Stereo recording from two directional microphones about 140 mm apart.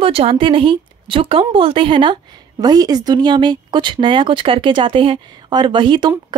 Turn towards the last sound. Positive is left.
turn(degrees=-35)  # may be behind; listen again after turning